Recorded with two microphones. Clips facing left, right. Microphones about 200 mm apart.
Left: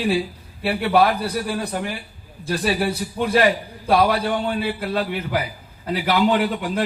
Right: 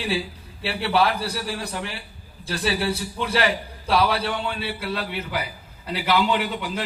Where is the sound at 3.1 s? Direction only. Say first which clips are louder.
Left 8 dB; 50° left (ahead or behind).